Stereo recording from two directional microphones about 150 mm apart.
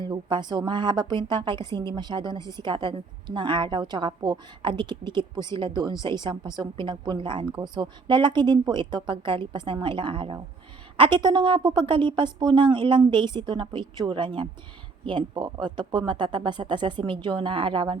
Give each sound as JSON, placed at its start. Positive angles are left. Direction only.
{"t": 0.0, "sound": "a woman's voice", "side_deg": -30}